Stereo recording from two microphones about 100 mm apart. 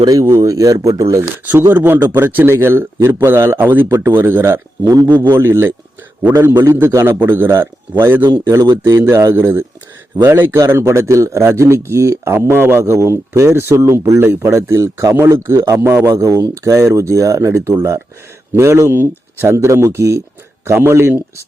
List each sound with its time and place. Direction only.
0.0 s speech: 35° right (ahead or behind)
1.7 s speech: 20° right (ahead or behind)
16.2 s speech: 30° right (ahead or behind)